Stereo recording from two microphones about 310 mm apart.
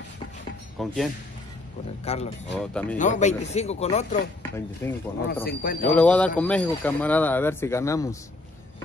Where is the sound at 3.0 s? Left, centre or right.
Left.